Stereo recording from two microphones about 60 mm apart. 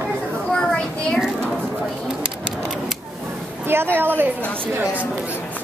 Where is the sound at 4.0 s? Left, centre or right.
Right.